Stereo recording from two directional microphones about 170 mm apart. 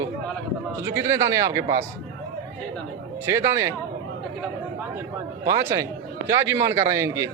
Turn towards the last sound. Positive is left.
turn(degrees=-15)  # may be behind; listen again after turning